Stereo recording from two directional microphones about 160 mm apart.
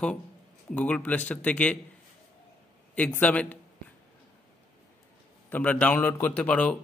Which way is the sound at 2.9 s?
10° left (ahead or behind).